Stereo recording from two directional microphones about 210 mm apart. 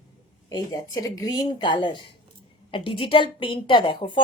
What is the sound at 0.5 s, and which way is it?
A woman's voice, 15° left (ahead or behind).